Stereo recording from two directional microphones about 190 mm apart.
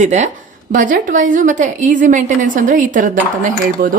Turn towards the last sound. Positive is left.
turn(degrees=-45)  # may be behind; listen again after turning